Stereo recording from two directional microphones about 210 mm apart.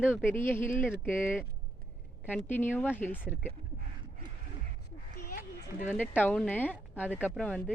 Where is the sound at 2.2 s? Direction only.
10° left (ahead or behind).